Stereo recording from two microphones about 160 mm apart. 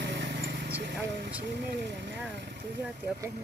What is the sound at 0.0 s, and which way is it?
Vehicle, 90° right.